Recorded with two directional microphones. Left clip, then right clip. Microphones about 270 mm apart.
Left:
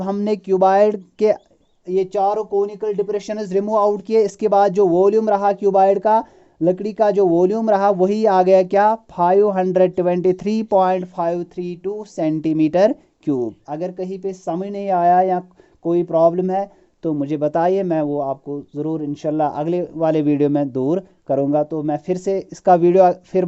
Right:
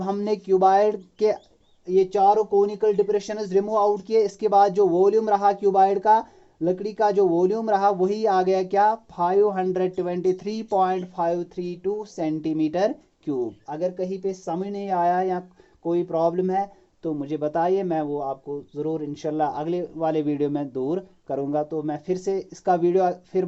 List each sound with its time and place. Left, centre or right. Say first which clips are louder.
0.0 s speech: left 4 dB; left